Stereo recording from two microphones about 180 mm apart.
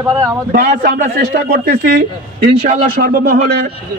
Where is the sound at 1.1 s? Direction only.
55° right (ahead or behind).